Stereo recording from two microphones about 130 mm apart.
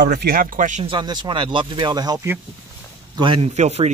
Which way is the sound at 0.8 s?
35° right (ahead or behind).